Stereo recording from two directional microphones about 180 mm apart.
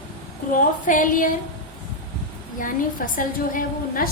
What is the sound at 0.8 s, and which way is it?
Speech, 45° left (ahead or behind).